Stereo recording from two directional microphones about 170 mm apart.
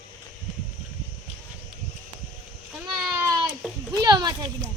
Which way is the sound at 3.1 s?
15° right (ahead or behind).